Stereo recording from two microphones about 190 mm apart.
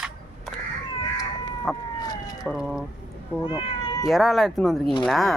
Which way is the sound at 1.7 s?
Centre (ahead or behind).